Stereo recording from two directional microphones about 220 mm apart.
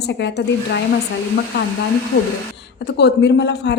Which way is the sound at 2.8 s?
50° left (ahead or behind).